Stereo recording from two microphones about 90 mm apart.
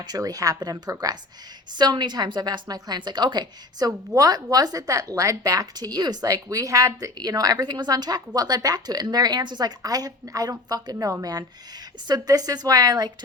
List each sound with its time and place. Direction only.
0.0 s a woman's voice: 45° right (ahead or behind)
10.9 s a woman's voice: 35° right (ahead or behind)